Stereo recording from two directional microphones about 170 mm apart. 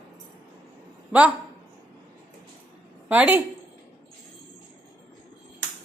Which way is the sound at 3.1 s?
10° right (ahead or behind).